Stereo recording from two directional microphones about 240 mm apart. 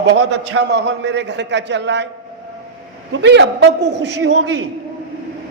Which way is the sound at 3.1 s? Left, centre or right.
Right.